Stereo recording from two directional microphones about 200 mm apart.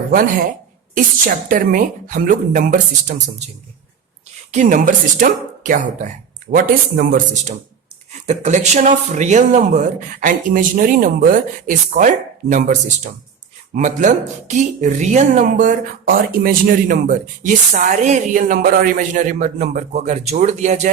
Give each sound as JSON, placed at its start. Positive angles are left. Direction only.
{"t": 0.9, "sound": "speech", "side_deg": -45}
{"t": 4.5, "sound": "a man's voice", "side_deg": -40}